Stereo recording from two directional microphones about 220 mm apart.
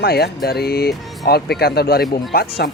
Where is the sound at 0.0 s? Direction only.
45° left (ahead or behind).